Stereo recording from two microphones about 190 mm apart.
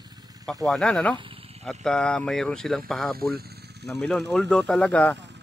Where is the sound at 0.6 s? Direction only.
Centre (ahead or behind).